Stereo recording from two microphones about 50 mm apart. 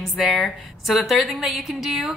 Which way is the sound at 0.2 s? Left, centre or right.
Centre.